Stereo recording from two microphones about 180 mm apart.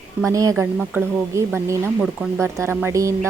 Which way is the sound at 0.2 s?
15° right (ahead or behind).